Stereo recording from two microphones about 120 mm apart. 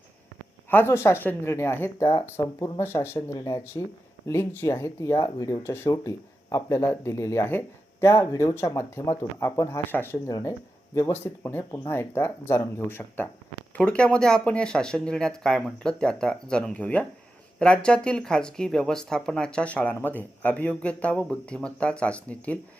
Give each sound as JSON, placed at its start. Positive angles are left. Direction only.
{"t": 0.7, "sound": "speech", "side_deg": 20}
{"t": 3.3, "sound": "speech", "side_deg": 35}
{"t": 4.3, "sound": "speech", "side_deg": 20}
{"t": 10.2, "sound": "speech", "side_deg": 30}
{"t": 10.9, "sound": "speech", "side_deg": 20}